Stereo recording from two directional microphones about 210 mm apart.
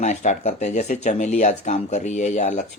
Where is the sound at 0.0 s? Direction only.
35° left (ahead or behind).